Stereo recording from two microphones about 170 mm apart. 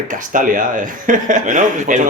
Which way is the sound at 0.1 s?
50° right (ahead or behind).